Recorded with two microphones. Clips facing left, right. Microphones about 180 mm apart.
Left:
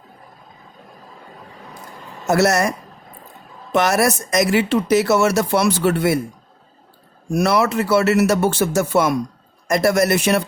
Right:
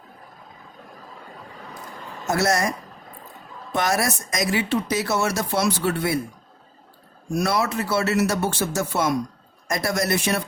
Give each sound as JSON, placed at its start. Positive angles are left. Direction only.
{"t": 2.3, "sound": "speech", "side_deg": 75}
{"t": 3.7, "sound": "speech", "side_deg": 80}
{"t": 7.3, "sound": "speech", "side_deg": 70}